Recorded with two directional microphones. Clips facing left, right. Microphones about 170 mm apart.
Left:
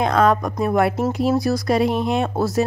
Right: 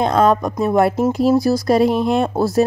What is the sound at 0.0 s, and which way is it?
A woman's voice, 30° right (ahead or behind).